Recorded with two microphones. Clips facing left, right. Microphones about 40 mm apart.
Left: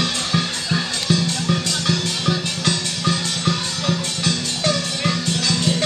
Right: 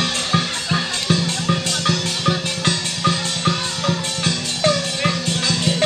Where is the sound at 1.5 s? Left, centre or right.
Centre.